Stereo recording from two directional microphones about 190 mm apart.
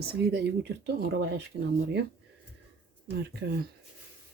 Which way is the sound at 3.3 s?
60° right (ahead or behind).